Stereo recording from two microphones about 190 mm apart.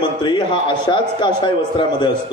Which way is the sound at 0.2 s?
25° left (ahead or behind).